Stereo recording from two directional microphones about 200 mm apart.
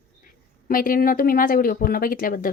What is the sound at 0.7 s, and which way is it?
A woman's voice, 45° left (ahead or behind).